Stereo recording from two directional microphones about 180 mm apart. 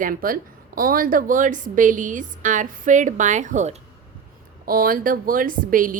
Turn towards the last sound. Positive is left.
turn(degrees=-50)  # may be behind; listen again after turning